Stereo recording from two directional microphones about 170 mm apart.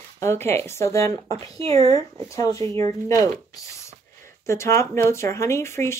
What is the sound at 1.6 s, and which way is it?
Speech, 35° right (ahead or behind).